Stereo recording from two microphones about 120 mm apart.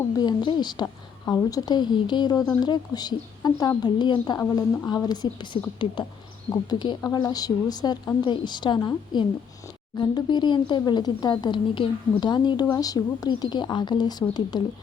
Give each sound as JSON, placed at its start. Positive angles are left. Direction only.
{"t": 0.2, "sound": "speech", "side_deg": 35}